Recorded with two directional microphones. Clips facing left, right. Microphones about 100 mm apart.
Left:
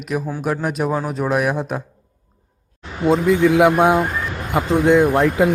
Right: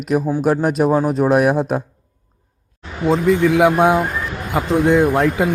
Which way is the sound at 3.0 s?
Centre (ahead or behind).